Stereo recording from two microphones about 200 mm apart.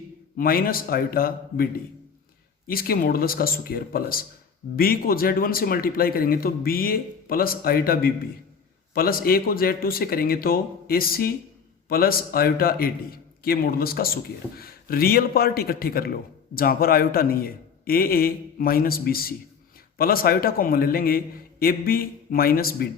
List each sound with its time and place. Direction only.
0.3 s a man's voice: 45° left (ahead or behind)